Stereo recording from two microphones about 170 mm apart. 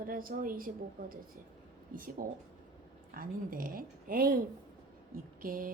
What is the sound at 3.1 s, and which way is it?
Speech, 55° right (ahead or behind).